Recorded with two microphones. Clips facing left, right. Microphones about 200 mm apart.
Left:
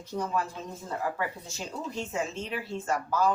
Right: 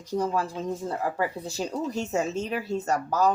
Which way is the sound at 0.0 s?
35° right (ahead or behind).